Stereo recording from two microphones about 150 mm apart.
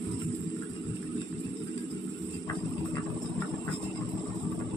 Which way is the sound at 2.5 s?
20° left (ahead or behind).